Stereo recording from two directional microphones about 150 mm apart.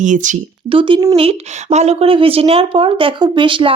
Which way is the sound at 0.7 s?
35° right (ahead or behind).